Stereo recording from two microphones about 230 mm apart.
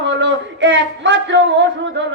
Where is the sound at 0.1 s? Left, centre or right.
Right.